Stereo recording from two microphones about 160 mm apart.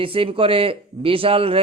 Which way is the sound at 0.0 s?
35° right (ahead or behind).